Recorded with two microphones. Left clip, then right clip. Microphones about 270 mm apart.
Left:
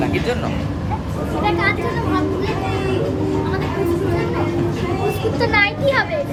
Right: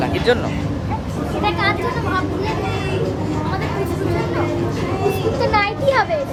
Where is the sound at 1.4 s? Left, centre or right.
Centre.